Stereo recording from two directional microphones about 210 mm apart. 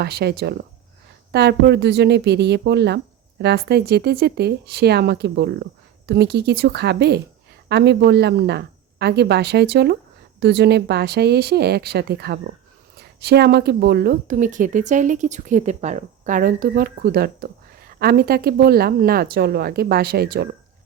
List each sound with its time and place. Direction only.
0.0 s a woman's voice: 50° right (ahead or behind)